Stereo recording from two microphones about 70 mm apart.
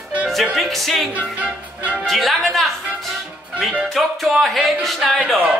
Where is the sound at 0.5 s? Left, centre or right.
Centre.